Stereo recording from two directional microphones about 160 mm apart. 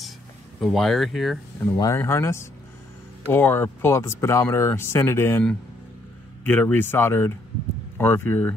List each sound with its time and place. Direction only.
0.6 s speech: centre (ahead or behind)
1.6 s speech: 20° left (ahead or behind)